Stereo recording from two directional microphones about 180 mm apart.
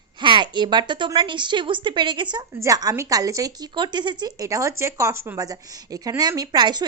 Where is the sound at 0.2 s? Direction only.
25° right (ahead or behind).